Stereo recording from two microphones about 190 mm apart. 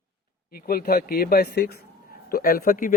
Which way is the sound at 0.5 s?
50° left (ahead or behind).